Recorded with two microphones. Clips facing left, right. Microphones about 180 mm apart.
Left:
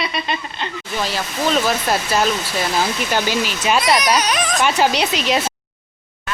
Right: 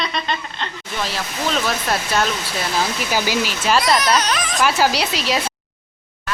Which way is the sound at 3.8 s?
20° left (ahead or behind).